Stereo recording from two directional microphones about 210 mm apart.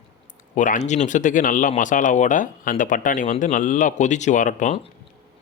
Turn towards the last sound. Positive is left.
turn(degrees=35)  # may be behind; listen again after turning